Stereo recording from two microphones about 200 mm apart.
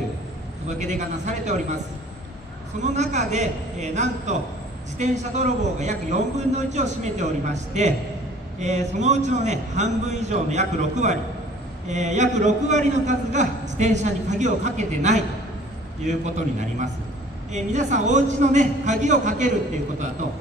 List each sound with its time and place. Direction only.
0.7 s a man's voice: 35° right (ahead or behind)
2.8 s a man's voice: 35° right (ahead or behind)